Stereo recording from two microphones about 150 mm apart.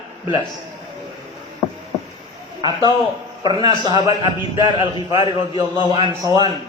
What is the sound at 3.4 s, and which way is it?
Speech, 30° right (ahead or behind).